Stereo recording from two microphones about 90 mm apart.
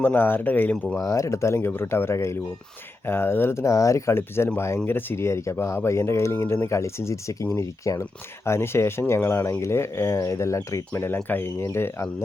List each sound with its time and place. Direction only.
0.0 s speech: 20° left (ahead or behind)
1.0 s speech: 35° left (ahead or behind)
10.9 s speech: 25° left (ahead or behind)